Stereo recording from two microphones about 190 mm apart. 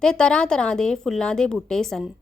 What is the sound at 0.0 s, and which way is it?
Speech, 5° left (ahead or behind).